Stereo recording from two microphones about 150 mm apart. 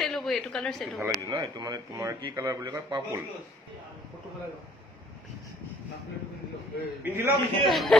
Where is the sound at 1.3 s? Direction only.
25° right (ahead or behind).